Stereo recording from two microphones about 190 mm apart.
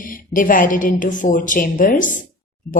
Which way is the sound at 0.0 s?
45° left (ahead or behind).